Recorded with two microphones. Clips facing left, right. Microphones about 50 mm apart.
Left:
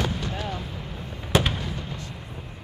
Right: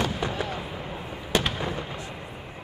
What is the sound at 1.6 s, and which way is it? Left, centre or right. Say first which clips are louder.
Fireworks: right 3 dB; right.